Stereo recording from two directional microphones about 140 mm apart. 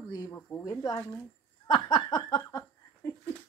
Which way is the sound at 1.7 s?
35° left (ahead or behind).